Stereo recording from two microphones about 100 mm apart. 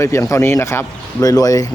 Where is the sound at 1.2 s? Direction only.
35° left (ahead or behind).